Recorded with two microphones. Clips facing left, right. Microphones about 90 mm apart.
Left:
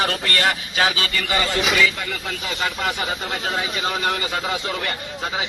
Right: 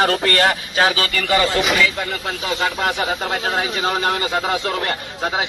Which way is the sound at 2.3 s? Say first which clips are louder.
Right 4 dB; 45° right (ahead or behind).